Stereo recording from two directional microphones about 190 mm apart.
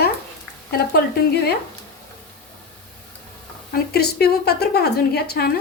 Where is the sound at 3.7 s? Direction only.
55° left (ahead or behind).